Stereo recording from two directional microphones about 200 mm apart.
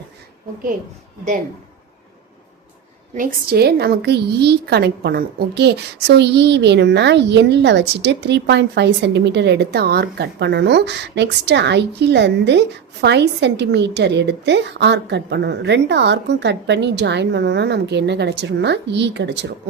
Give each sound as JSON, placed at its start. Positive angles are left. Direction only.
{"t": 3.2, "sound": "a woman's voice", "side_deg": -45}